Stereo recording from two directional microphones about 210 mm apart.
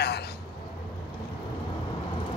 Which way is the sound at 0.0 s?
50° left (ahead or behind).